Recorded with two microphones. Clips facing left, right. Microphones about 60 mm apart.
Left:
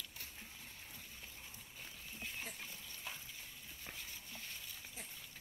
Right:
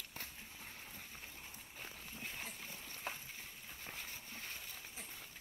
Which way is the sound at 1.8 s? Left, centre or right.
Right.